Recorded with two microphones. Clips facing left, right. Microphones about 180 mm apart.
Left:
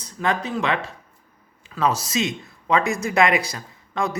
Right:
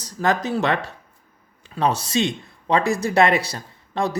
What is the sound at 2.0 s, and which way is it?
Speech, 30° right (ahead or behind).